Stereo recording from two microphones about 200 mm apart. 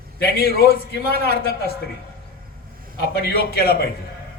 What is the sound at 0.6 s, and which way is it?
Speech, 50° left (ahead or behind).